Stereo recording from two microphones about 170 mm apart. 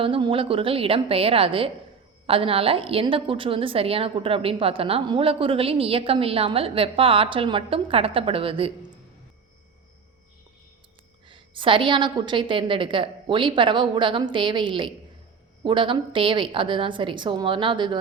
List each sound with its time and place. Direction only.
0.0 s a woman's voice: 30° right (ahead or behind)
11.3 s a woman's voice: 30° right (ahead or behind)